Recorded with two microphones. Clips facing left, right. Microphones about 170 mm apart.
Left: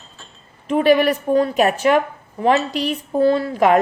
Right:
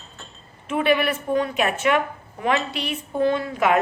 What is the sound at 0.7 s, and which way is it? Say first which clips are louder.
A woman's voice: left 6 dB; 40° left (ahead or behind).